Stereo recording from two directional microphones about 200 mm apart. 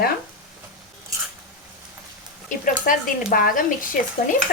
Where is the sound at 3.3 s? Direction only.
45° left (ahead or behind).